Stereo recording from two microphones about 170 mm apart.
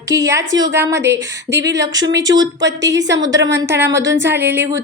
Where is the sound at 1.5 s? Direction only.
90° right.